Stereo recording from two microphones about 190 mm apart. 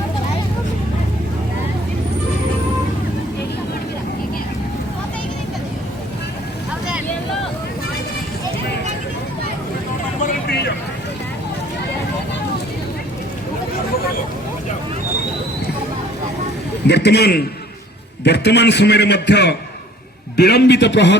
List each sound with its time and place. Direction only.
16.8 s a man's voice: 60° left (ahead or behind)